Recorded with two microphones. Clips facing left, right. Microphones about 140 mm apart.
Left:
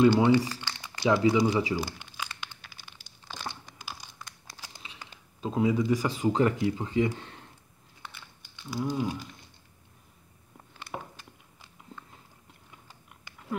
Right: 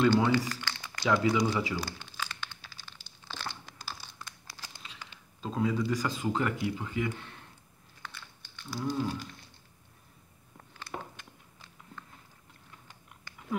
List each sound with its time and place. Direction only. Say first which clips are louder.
0.2 s speech: left 5 dB; 25° left (ahead or behind)
2.8 s crumpling: even; 10° left (ahead or behind)
4.6 s a sound: left 2 dB; 15° left (ahead or behind)
5.4 s speech: left 4 dB; 15° left (ahead or behind)
8.0 s biting: even; 15° left (ahead or behind)
8.7 s a sound: left 2 dB; 15° left (ahead or behind)
12.0 s biting: right 2 dB; 15° left (ahead or behind)